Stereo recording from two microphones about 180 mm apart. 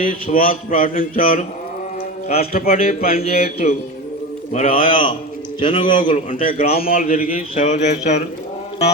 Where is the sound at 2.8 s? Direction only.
55° left (ahead or behind).